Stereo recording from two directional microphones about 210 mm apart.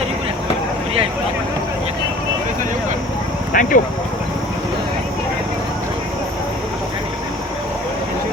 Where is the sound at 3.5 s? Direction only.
40° left (ahead or behind).